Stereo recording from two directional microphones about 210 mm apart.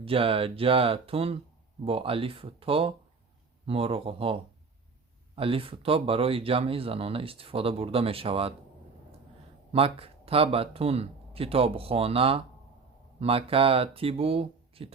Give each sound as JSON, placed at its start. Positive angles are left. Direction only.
{"t": 0.0, "sound": "speech", "side_deg": -25}
{"t": 5.4, "sound": "speech", "side_deg": -25}
{"t": 9.7, "sound": "speech", "side_deg": -25}